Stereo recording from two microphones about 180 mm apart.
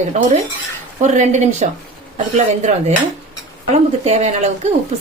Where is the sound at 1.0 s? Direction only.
40° right (ahead or behind).